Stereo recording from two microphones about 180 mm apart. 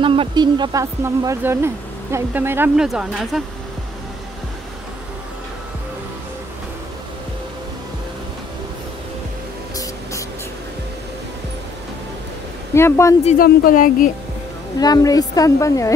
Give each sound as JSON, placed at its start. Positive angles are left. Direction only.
{"t": 0.0, "sound": "speech", "side_deg": -30}
{"t": 12.7, "sound": "speech", "side_deg": 15}
{"t": 13.4, "sound": "speech", "side_deg": 50}
{"t": 14.8, "sound": "a woman's voice", "side_deg": 20}